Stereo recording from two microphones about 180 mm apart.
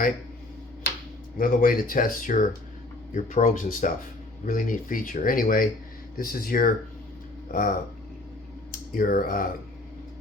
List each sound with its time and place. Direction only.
1.4 s speech: 50° left (ahead or behind)
9.0 s speech: 50° left (ahead or behind)